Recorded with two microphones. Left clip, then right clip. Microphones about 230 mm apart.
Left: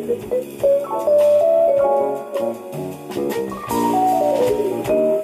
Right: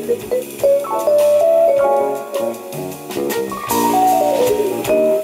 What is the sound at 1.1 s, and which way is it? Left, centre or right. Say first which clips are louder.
Music: right 1 dB; centre.